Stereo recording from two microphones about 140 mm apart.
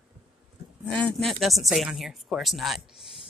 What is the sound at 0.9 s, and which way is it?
Speech, 5° left (ahead or behind).